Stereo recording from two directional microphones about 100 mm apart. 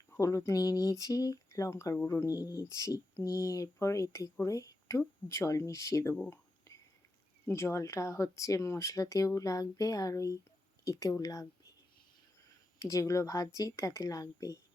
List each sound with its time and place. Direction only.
0.2 s speech: 30° left (ahead or behind)
7.4 s speech: 25° left (ahead or behind)
12.8 s speech: 35° left (ahead or behind)